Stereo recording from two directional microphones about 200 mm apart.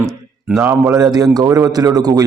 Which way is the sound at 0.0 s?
15° right (ahead or behind).